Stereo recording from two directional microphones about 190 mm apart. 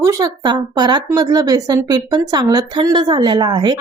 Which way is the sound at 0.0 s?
20° right (ahead or behind).